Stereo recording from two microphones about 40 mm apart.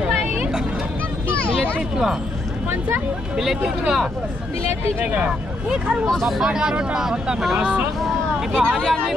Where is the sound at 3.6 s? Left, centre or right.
Centre.